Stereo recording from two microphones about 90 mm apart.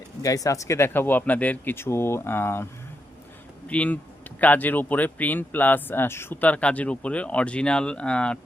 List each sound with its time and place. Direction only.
0.2 s speech: 40° left (ahead or behind)
3.7 s speech: 15° left (ahead or behind)